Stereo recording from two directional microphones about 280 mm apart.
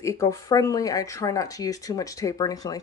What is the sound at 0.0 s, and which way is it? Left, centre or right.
Speech, centre.